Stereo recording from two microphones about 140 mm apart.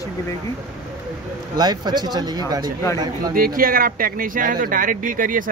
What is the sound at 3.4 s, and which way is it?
Speech, 90° right.